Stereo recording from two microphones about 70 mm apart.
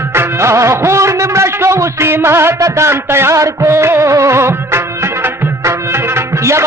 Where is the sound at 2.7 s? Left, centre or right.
Right.